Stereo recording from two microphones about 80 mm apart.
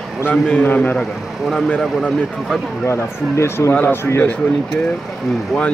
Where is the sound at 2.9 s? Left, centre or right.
Left.